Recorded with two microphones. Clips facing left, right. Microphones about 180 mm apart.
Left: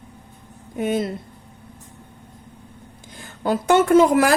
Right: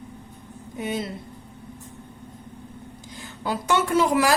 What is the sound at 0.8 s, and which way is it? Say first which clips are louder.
Speech: left 6 dB; 50° left (ahead or behind).